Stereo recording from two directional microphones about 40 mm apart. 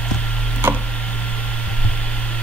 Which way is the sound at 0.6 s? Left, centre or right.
Right.